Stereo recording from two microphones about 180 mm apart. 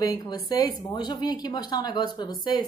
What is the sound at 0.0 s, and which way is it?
Speech, 20° left (ahead or behind).